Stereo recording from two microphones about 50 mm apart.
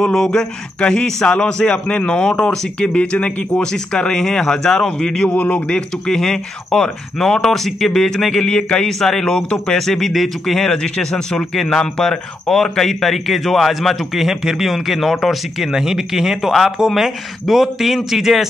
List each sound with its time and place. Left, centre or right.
0.0 s speech: centre
5.3 s speech: left
5.7 s speech: centre
9.8 s speech: centre
15.7 s speech: centre